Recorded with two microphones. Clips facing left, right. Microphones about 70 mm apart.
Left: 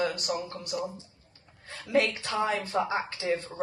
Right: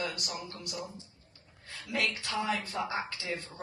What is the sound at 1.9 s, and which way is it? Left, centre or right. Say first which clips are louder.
Speech: left 7 dB; left.